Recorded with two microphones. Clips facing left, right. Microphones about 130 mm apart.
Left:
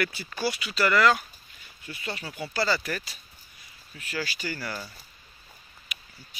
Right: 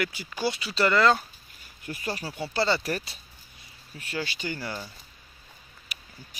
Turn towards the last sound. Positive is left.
turn(degrees=-35)  # may be behind; listen again after turning